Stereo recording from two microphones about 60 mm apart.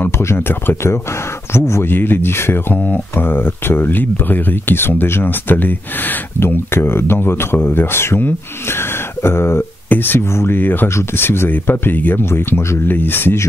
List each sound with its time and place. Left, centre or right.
0.2 s speech: left